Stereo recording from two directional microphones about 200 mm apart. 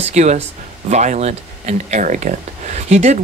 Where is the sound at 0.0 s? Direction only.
35° right (ahead or behind).